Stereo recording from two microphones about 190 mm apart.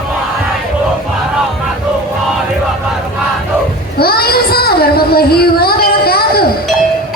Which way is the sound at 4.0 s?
55° left (ahead or behind).